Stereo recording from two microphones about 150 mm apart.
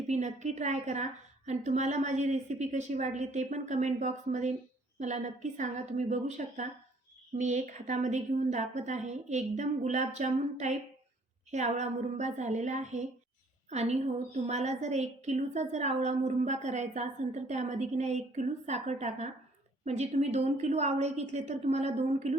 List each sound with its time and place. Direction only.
0.1 s a woman's voice: 50° right (ahead or behind)